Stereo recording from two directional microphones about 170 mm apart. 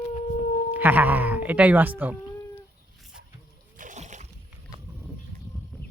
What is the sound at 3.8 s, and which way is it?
Splash, 45° right (ahead or behind).